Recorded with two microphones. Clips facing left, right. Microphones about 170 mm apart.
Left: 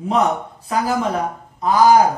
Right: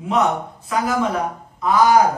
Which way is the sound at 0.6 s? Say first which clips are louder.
Left 1 dB; 30° left (ahead or behind).